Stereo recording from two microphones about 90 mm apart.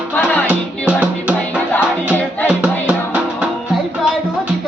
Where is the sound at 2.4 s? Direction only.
15° right (ahead or behind).